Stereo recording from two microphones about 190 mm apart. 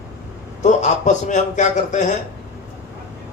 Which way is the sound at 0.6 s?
40° left (ahead or behind).